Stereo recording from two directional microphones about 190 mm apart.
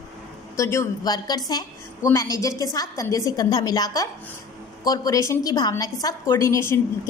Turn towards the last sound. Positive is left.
turn(degrees=15)  # may be behind; listen again after turning